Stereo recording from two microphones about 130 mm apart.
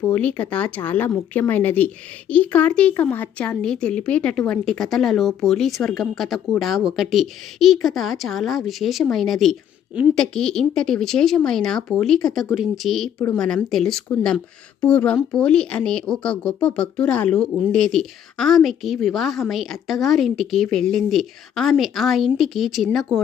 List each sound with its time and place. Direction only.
0.0 s speech: 10° left (ahead or behind)